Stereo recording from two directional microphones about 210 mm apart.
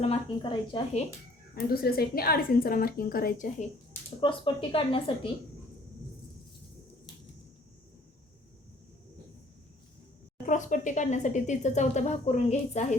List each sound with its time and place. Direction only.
0.0 s speech: 25° left (ahead or behind)
1.5 s a woman's voice: 45° left (ahead or behind)
4.2 s speech: 25° left (ahead or behind)
10.4 s speech: 35° left (ahead or behind)